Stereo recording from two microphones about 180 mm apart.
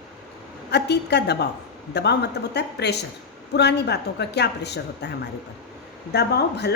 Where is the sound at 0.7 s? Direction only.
70° left (ahead or behind).